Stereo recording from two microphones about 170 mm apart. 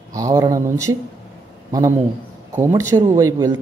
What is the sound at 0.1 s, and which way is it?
A man's voice, 20° right (ahead or behind).